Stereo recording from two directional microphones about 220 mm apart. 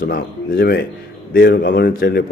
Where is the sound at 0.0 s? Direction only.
45° left (ahead or behind).